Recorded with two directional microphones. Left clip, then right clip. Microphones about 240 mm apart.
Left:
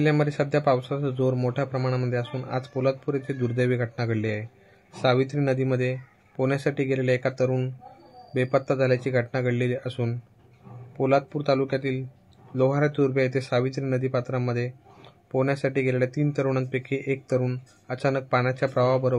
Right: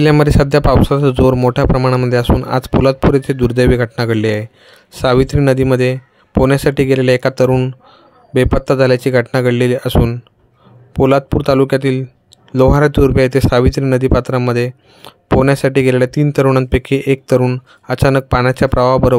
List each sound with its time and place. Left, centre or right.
0.0 s speech: right